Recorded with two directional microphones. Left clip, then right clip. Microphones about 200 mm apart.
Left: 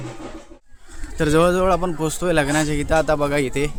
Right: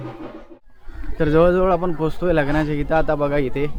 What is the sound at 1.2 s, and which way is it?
A man's voice, 20° left (ahead or behind).